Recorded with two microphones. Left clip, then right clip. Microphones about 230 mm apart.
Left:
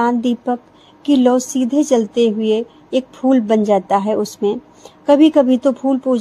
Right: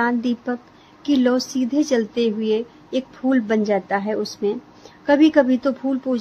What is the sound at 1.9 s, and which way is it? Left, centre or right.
A woman's voice, centre.